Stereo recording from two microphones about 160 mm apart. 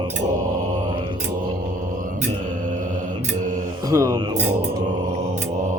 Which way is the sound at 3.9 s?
20° right (ahead or behind).